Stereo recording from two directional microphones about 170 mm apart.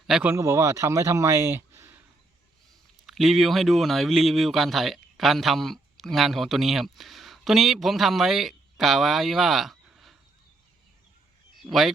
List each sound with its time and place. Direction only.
0.1 s speech: 10° right (ahead or behind)
3.1 s speech: centre (ahead or behind)
11.6 s speech: centre (ahead or behind)